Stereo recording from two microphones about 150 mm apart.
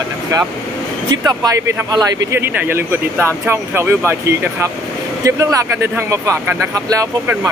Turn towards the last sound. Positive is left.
turn(degrees=-20)  # may be behind; listen again after turning